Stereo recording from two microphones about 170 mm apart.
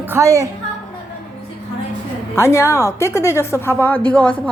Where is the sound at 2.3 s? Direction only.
15° left (ahead or behind).